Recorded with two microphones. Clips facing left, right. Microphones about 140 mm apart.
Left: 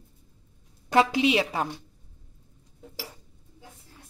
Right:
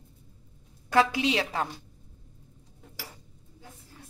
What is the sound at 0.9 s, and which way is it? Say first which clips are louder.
Speech: left 2 dB; 20° left (ahead or behind).